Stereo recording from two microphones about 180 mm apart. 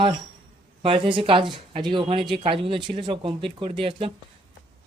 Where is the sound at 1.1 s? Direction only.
30° right (ahead or behind).